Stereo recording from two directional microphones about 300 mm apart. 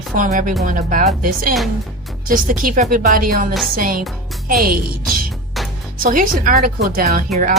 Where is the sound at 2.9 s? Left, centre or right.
Right.